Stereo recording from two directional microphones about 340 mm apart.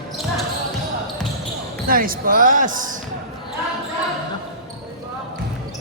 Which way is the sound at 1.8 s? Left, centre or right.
Right.